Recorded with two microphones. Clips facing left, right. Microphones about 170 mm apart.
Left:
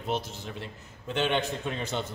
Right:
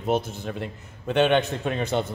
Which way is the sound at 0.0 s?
50° right (ahead or behind).